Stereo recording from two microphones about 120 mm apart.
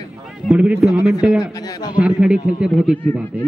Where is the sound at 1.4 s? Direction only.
35° left (ahead or behind).